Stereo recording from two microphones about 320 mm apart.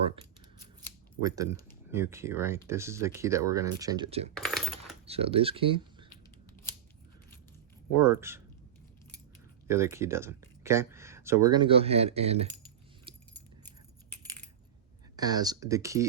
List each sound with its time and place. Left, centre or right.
1.2 s speech: centre
4.4 s coin: centre
5.0 s speech: centre
7.9 s speech: centre
9.6 s speech: centre
13.1 s keys jangling: centre
14.1 s coin: centre
15.1 s speech: centre